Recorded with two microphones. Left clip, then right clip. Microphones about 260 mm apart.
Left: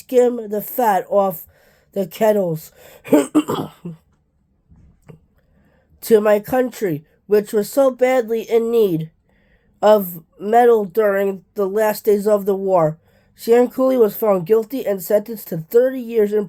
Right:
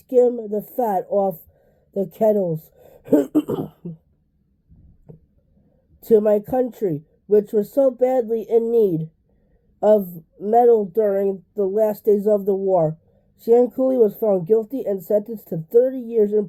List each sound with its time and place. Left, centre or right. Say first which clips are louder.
0.0 s speech: left 1 dB; centre
6.0 s speech: left 2 dB; centre
10.2 s speech: left 1 dB; left
10.5 s speech: left 2 dB; centre